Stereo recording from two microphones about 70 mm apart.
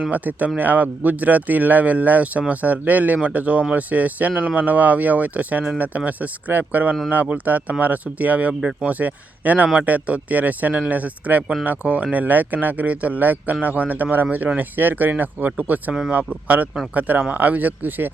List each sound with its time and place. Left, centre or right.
0.1 s speech: right